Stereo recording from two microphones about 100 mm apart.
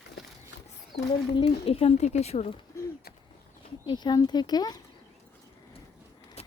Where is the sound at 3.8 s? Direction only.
45° left (ahead or behind).